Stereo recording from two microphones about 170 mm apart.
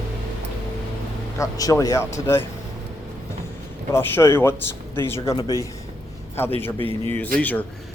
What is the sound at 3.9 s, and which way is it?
A man's voice, 15° left (ahead or behind).